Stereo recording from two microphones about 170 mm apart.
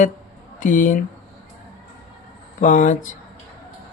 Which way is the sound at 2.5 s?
50° left (ahead or behind).